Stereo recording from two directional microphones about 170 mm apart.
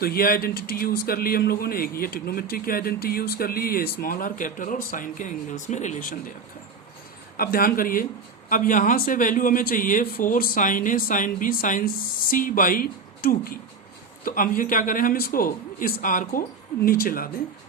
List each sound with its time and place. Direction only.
0.0 s speech: 60° left (ahead or behind)
7.3 s speech: 60° left (ahead or behind)